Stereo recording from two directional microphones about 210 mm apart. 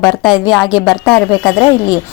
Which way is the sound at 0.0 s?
Centre (ahead or behind).